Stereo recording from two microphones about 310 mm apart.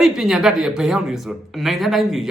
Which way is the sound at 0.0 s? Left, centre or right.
Centre.